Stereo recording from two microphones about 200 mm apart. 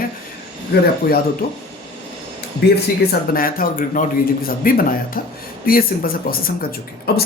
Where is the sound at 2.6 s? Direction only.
50° left (ahead or behind).